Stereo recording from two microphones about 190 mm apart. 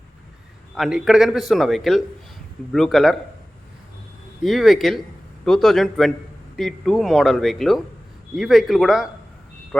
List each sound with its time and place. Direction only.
0.8 s a man's voice: 5° right (ahead or behind)
4.4 s a man's voice: centre (ahead or behind)